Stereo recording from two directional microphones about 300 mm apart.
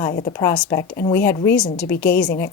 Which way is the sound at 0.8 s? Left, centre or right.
Left.